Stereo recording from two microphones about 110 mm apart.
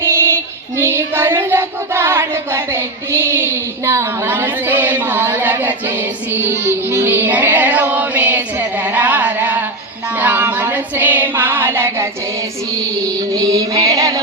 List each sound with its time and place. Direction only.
0.0 s child singing: 25° right (ahead or behind)
6.9 s female singing: 20° right (ahead or behind)
10.2 s child singing: 15° right (ahead or behind)
13.3 s female singing: 35° right (ahead or behind)